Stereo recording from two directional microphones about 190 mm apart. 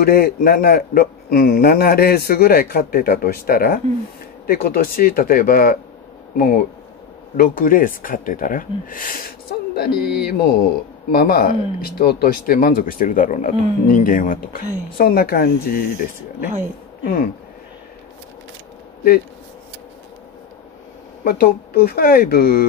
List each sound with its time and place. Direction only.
0.0 s speech: 50° left (ahead or behind)
9.8 s a sound: 55° left (ahead or behind)
11.1 s speech: 50° left (ahead or behind)
21.2 s speech: 50° left (ahead or behind)